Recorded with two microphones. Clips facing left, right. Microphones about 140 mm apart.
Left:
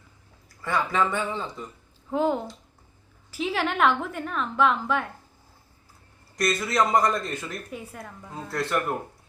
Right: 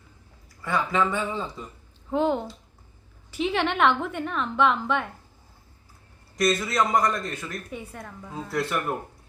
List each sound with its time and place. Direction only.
0.6 s speech: centre (ahead or behind)
6.3 s speech: centre (ahead or behind)